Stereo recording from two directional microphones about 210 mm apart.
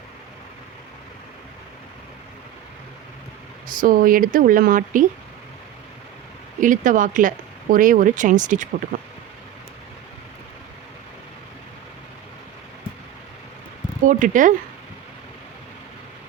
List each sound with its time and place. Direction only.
3.8 s speech: 40° right (ahead or behind)
6.6 s speech: 40° right (ahead or behind)
14.0 s speech: 40° right (ahead or behind)